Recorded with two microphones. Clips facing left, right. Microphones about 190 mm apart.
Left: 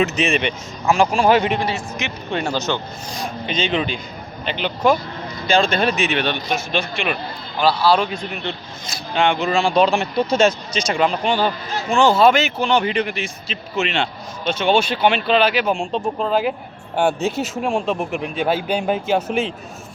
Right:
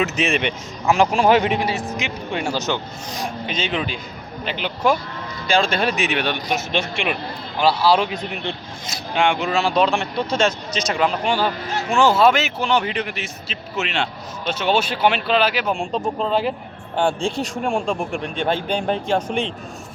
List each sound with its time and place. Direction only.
0.0 s speech: 5° right (ahead or behind)
6.7 s speech: 25° right (ahead or behind); by 19.5 s 5° left (ahead or behind)